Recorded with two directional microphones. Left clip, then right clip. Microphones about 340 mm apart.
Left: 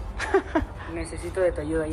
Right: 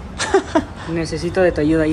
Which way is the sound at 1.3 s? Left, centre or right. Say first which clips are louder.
Right 9 dB; centre.